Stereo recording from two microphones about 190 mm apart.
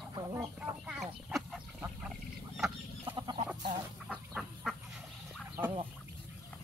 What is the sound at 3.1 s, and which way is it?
Chicken, 25° right (ahead or behind).